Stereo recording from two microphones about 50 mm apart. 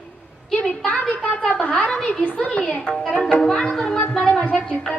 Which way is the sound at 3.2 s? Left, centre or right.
Left.